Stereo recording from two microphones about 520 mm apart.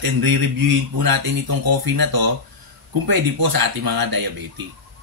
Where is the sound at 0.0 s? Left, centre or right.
Right.